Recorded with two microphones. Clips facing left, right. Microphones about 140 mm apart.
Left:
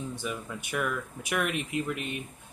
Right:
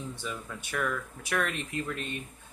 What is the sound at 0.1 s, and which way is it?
Speech, 10° left (ahead or behind).